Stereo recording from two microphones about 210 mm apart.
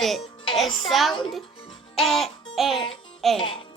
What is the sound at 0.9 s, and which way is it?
Speech, centre (ahead or behind).